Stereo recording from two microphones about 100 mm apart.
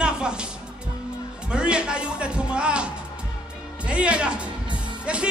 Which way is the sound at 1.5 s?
10° right (ahead or behind).